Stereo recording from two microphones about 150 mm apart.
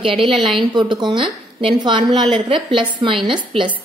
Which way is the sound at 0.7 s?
30° right (ahead or behind).